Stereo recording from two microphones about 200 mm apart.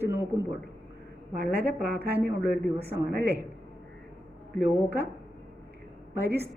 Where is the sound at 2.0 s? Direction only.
10° right (ahead or behind).